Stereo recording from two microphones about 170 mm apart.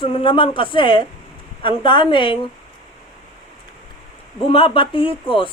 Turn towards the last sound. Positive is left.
turn(degrees=30)  # may be behind; listen again after turning